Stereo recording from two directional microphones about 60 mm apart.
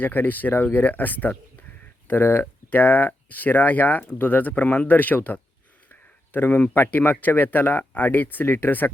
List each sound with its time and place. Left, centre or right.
0.0 s speech: left